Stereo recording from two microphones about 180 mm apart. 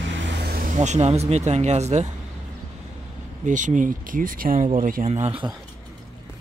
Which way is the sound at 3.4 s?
45° right (ahead or behind).